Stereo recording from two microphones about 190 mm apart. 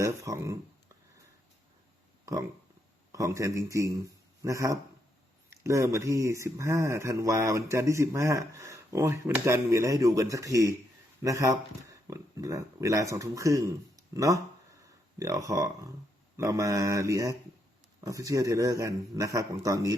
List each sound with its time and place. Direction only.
0.0 s speech: 15° right (ahead or behind)
2.2 s a man's voice: 15° right (ahead or behind)